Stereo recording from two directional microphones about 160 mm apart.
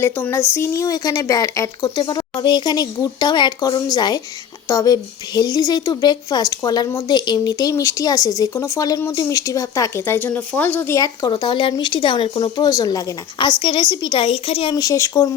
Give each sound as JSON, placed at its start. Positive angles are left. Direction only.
{"t": 0.0, "sound": "a child's voice", "side_deg": 15}
{"t": 13.6, "sound": "a woman's voice", "side_deg": 35}